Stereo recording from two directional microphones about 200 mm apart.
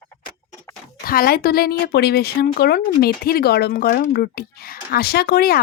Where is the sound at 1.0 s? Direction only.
50° left (ahead or behind).